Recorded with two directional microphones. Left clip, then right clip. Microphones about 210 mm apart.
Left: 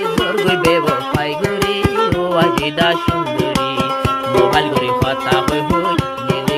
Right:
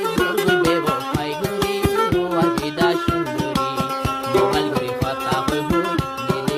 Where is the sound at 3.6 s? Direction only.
Centre (ahead or behind).